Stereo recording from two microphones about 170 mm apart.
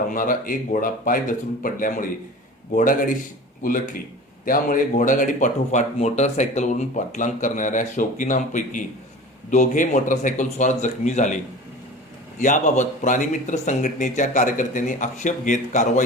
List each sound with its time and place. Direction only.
0.1 s speech: 55° left (ahead or behind)
4.4 s speech: 50° left (ahead or behind)
12.4 s speech: 45° left (ahead or behind)